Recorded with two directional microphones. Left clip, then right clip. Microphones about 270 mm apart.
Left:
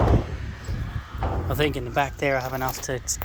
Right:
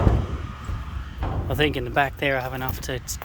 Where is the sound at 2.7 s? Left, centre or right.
Centre.